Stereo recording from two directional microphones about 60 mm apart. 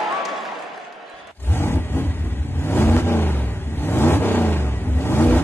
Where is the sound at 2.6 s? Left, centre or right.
Left.